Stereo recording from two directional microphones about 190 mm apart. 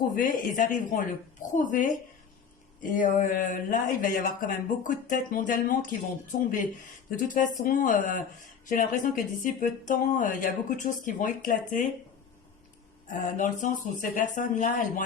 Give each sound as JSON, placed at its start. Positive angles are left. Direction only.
{"t": 0.0, "sound": "speech", "side_deg": 45}
{"t": 7.2, "sound": "speech", "side_deg": 45}
{"t": 13.3, "sound": "speech", "side_deg": 40}